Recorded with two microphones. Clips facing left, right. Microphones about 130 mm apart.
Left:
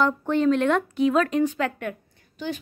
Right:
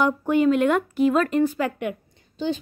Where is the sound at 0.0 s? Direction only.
10° right (ahead or behind).